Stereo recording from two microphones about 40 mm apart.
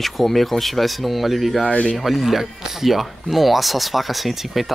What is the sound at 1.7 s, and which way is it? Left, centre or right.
Speech, left.